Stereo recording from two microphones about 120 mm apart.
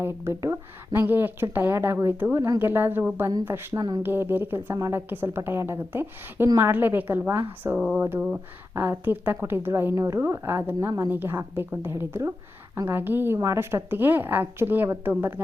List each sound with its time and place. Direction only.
0.0 s a woman's voice: 25° right (ahead or behind)
3.8 s speech: 35° right (ahead or behind)
4.0 s a woman's voice: 20° right (ahead or behind)
7.8 s a woman's voice: 5° right (ahead or behind)
8.7 s a woman's voice: 20° right (ahead or behind)